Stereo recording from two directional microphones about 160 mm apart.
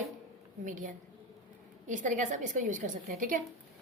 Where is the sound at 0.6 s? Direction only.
55° right (ahead or behind).